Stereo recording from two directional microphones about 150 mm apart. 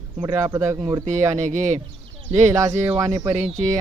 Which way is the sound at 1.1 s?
55° right (ahead or behind).